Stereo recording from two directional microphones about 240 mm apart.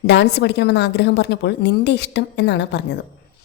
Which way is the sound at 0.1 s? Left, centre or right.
Left.